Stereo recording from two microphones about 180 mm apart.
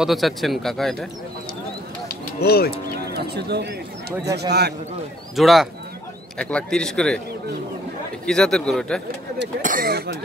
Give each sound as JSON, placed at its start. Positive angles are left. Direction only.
{"t": 0.0, "sound": "speech", "side_deg": 0}
{"t": 2.0, "sound": "a sound", "side_deg": 60}
{"t": 2.7, "sound": "a man's voice", "side_deg": -65}
{"t": 5.3, "sound": "speech", "side_deg": 0}
{"t": 8.3, "sound": "speech", "side_deg": 5}
{"t": 9.6, "sound": "speech", "side_deg": -50}